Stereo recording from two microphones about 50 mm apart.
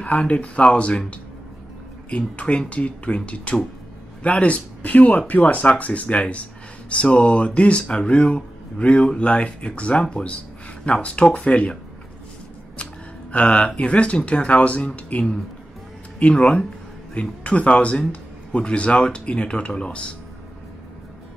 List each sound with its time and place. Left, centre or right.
0.0 s speech: left
2.0 s speech: left
13.3 s speech: left